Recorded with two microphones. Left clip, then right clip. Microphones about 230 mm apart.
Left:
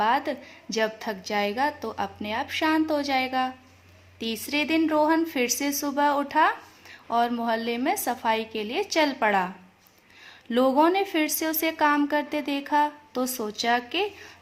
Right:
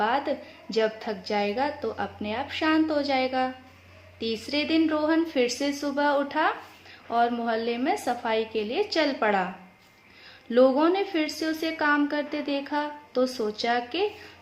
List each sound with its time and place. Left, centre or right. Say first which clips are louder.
0.0 s a woman's voice: left 2 dB; left
10.5 s a woman's voice: even; left